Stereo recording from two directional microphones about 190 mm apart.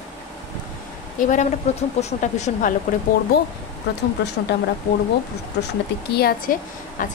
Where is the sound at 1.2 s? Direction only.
45° left (ahead or behind).